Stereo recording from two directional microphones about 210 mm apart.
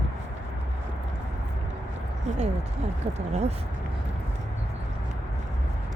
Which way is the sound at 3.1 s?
30° right (ahead or behind).